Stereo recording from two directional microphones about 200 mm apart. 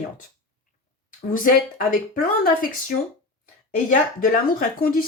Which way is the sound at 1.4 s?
45° left (ahead or behind).